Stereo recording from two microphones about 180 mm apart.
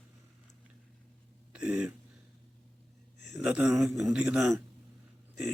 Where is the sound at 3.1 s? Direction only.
75° left (ahead or behind).